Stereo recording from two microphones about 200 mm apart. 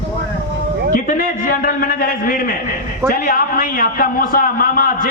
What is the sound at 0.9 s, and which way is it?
A man's voice, 40° left (ahead or behind).